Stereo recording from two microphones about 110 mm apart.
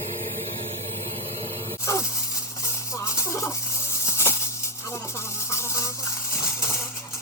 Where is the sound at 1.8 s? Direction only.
25° left (ahead or behind).